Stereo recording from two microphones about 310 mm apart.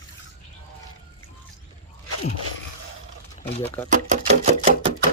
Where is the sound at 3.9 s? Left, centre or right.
Right.